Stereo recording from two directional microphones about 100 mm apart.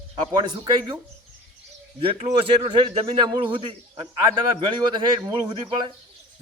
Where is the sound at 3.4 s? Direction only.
60° right (ahead or behind).